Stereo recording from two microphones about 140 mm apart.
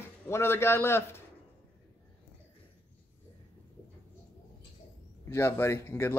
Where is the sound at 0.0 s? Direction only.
20° left (ahead or behind).